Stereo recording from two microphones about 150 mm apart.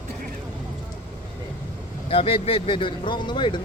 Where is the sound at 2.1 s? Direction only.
40° left (ahead or behind).